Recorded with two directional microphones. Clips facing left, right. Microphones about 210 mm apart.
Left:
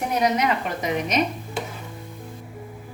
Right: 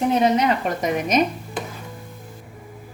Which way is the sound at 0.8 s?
45° right (ahead or behind).